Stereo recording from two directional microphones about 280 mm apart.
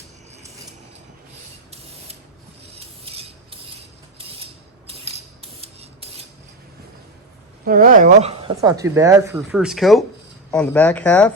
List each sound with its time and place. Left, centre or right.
2.7 s a sound: right
4.9 s rub: right
7.6 s speech: right; by 11.3 s centre